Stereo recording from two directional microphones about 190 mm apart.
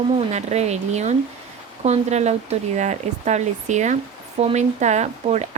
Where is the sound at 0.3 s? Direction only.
35° right (ahead or behind).